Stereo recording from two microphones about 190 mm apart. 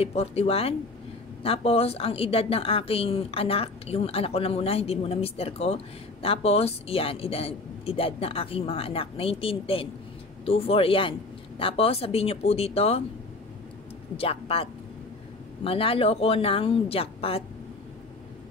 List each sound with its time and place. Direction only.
0.0 s a woman's voice: 35° left (ahead or behind)
14.1 s a woman's voice: 30° left (ahead or behind)